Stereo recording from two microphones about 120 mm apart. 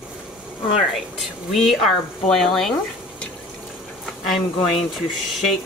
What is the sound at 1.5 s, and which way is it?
Speech, centre (ahead or behind).